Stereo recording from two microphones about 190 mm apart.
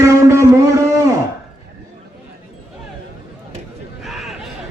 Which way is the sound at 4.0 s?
Centre (ahead or behind).